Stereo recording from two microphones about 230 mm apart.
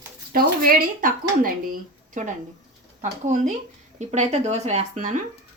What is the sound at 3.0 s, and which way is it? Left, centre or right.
Speech, right.